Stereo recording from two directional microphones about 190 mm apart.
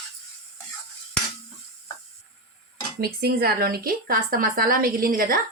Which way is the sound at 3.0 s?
55° right (ahead or behind).